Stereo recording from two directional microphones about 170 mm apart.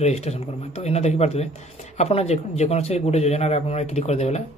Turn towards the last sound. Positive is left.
turn(degrees=40)  # may be behind; listen again after turning